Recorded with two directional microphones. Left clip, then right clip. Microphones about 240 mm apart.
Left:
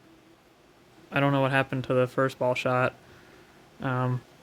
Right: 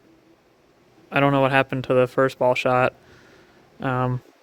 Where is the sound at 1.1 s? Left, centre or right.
Right.